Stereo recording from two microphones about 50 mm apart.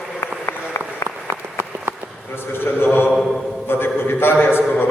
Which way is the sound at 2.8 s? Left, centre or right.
Left.